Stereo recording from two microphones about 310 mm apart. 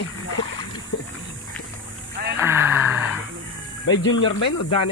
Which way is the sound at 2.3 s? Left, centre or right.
Centre.